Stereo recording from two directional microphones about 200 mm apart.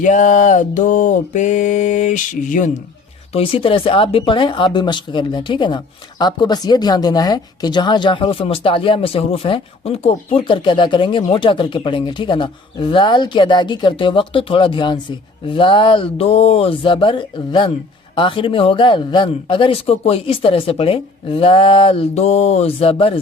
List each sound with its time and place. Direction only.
0.0 s mantra: 40° left (ahead or behind)
3.3 s speech: 25° left (ahead or behind)